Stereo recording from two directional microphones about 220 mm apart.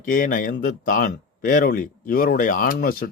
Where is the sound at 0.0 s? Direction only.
40° left (ahead or behind).